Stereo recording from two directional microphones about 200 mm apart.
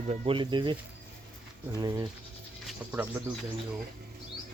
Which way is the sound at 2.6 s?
5° right (ahead or behind).